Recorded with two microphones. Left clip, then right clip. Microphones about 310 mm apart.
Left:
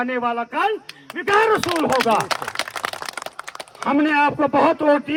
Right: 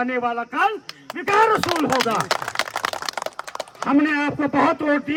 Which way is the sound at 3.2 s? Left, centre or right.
Right.